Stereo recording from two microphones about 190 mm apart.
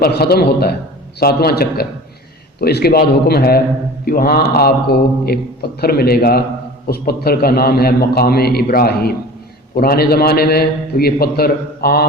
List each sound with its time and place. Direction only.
0.0 s a man's voice: 55° left (ahead or behind)